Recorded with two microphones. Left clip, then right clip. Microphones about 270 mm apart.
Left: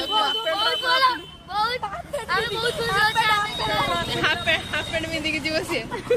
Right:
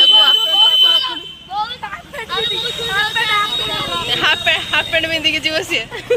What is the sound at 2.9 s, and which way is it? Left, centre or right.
Speech, left.